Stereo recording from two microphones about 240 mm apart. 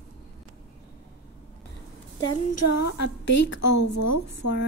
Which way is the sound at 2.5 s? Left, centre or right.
Left.